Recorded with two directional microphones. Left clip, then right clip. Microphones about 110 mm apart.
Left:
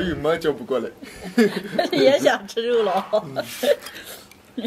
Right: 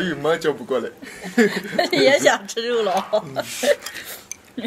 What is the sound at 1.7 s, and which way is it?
Speech, 15° right (ahead or behind).